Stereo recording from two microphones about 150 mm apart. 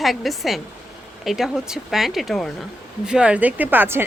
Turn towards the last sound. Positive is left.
turn(degrees=-15)  # may be behind; listen again after turning